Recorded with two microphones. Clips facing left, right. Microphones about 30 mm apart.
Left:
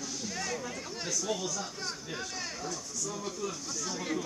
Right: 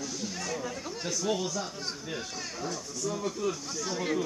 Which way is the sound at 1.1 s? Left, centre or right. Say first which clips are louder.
Right 3 dB; centre.